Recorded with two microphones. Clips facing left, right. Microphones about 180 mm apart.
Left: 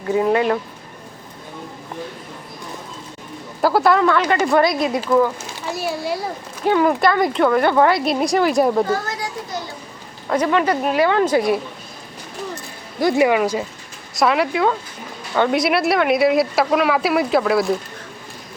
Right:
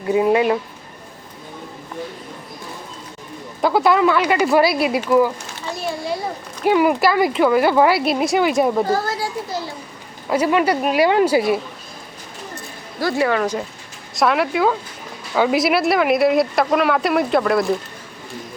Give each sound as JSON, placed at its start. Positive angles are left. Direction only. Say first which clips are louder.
{"t": 0.1, "sound": "speech", "louder": "right 1 dB", "side_deg": -15}
{"t": 3.6, "sound": "speech", "louder": "even", "side_deg": 0}
{"t": 5.7, "sound": "a child's voice", "louder": "left 1 dB", "side_deg": 5}
{"t": 6.6, "sound": "speech", "louder": "right 1 dB", "side_deg": -15}
{"t": 10.2, "sound": "speech", "louder": "right 1 dB", "side_deg": -10}
{"t": 13.0, "sound": "speech", "louder": "left 3 dB", "side_deg": 20}